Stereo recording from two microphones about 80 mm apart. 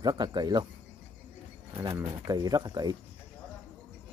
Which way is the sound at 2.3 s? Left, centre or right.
Right.